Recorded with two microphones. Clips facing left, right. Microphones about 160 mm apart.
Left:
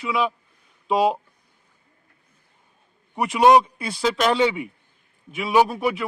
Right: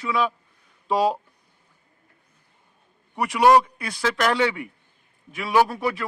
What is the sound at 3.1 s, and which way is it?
A man's voice, 20° left (ahead or behind).